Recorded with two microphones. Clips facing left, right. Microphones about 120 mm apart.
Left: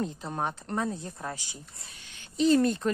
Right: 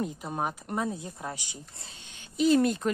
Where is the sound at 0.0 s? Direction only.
5° right (ahead or behind).